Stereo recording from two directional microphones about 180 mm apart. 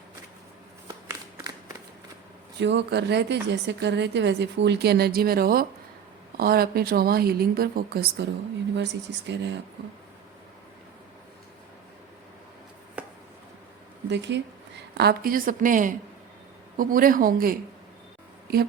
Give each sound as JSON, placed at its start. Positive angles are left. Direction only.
{"t": 2.6, "sound": "a woman's voice", "side_deg": -75}
{"t": 8.7, "sound": "speech", "side_deg": -75}
{"t": 13.0, "sound": "chopping", "side_deg": -10}
{"t": 14.1, "sound": "speech", "side_deg": -75}
{"t": 14.9, "sound": "a woman's voice", "side_deg": -55}